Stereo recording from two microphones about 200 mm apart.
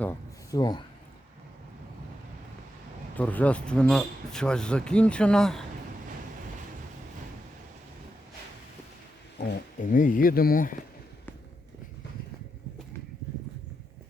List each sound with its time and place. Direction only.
0.0 s a sound: 15° left (ahead or behind)
3.2 s speech: 10° left (ahead or behind)
9.4 s speech: 50° left (ahead or behind)